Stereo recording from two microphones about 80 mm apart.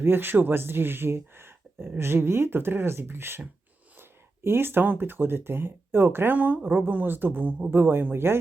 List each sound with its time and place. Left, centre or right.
0.0 s speech: right